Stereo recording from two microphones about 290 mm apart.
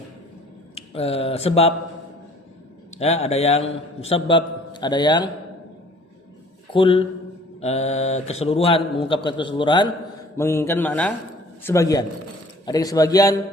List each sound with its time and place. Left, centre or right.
0.8 s speech: left
2.9 s a man's voice: left
6.7 s a man's voice: centre